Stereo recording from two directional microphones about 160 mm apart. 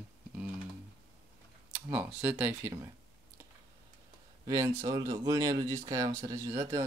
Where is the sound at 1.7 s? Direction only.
10° right (ahead or behind).